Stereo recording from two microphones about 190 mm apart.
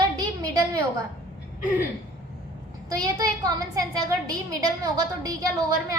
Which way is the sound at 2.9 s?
20° right (ahead or behind).